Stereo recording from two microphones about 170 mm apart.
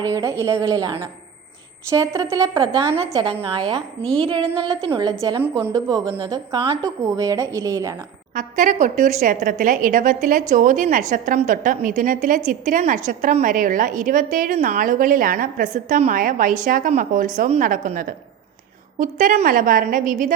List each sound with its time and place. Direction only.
0.0 s a woman's voice: 20° right (ahead or behind)
8.4 s a woman's voice: 50° right (ahead or behind)